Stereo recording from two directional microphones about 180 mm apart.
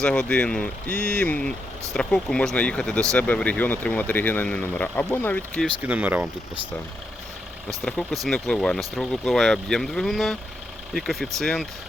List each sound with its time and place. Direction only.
0.0 s speech: 5° left (ahead or behind)
5.8 s speech: 10° right (ahead or behind)
7.7 s speech: centre (ahead or behind)